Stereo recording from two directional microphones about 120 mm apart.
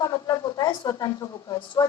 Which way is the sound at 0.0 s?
35° left (ahead or behind).